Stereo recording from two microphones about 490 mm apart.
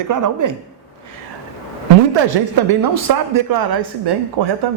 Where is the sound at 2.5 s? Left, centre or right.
Right.